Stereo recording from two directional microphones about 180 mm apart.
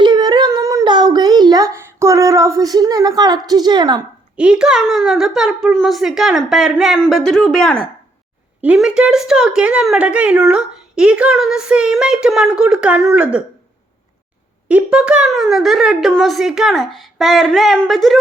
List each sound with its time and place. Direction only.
0.0 s a sound: 25° right (ahead or behind)
4.4 s a woman's voice: 5° right (ahead or behind)
14.7 s a woman's voice: 5° right (ahead or behind)